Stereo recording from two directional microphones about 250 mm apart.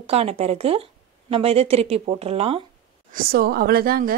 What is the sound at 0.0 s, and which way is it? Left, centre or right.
Speech, right.